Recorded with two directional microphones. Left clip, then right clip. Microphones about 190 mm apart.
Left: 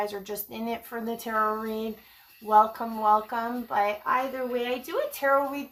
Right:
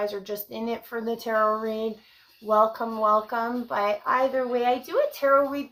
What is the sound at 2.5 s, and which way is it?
A woman's voice, 10° left (ahead or behind).